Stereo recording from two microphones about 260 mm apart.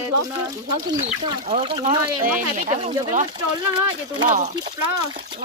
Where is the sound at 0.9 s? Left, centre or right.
Right.